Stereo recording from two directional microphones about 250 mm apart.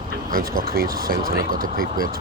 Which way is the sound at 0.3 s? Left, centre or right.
Right.